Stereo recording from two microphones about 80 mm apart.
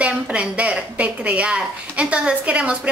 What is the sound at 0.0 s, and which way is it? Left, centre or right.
A woman's voice, centre.